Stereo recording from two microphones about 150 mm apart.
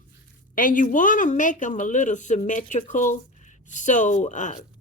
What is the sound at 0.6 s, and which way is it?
Speech, 65° left (ahead or behind).